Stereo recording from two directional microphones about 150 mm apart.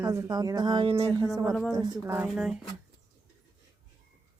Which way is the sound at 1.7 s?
25° right (ahead or behind).